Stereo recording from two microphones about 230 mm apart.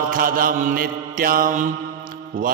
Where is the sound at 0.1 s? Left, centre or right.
Right.